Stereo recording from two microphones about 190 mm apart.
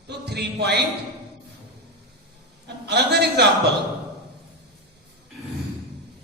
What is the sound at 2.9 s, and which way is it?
Speech, 60° right (ahead or behind).